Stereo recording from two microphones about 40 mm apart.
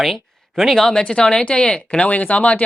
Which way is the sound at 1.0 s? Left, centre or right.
Left.